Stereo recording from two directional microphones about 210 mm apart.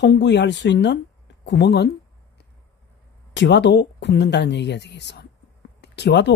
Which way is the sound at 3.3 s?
55° left (ahead or behind).